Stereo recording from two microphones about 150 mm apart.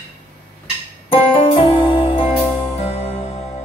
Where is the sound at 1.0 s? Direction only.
35° left (ahead or behind).